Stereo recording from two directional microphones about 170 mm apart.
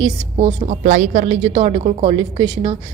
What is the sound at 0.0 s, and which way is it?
Speech, 30° right (ahead or behind).